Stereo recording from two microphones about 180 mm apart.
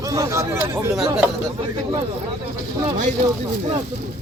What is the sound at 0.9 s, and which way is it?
Speech, centre (ahead or behind).